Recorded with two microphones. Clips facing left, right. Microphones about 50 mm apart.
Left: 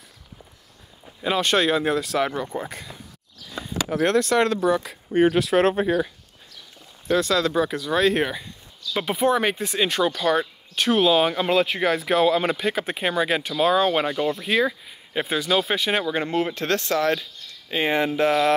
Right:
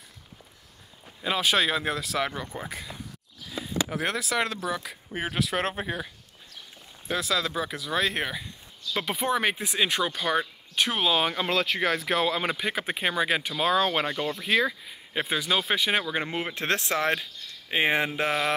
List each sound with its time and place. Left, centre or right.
1.0 s speech: centre
11.5 s speech: centre
16.3 s speech: centre
16.6 s speech: right